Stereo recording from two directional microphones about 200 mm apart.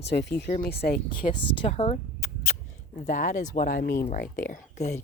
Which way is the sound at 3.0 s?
40° left (ahead or behind).